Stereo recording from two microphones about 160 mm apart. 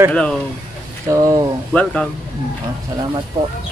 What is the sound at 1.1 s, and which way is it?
Speech, 20° right (ahead or behind).